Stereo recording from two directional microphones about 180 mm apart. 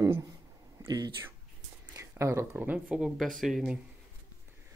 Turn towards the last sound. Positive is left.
turn(degrees=0)  # may be behind; listen again after turning